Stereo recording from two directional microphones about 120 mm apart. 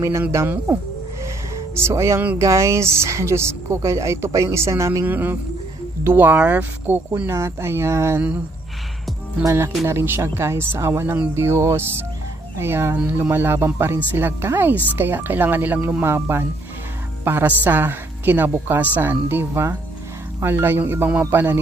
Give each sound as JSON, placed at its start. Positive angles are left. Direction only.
{"t": 0.3, "sound": "speech", "side_deg": -20}
{"t": 1.2, "sound": "music", "side_deg": -25}
{"t": 2.3, "sound": "speech", "side_deg": -25}
{"t": 9.4, "sound": "speech", "side_deg": -20}